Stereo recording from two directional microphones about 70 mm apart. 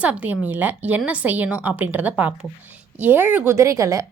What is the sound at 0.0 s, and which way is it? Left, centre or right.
Speech, right.